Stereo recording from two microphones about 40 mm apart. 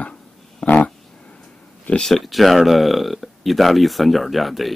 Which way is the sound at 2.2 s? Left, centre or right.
Centre.